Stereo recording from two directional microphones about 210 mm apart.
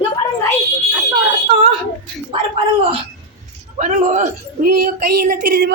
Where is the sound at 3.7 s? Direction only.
35° right (ahead or behind).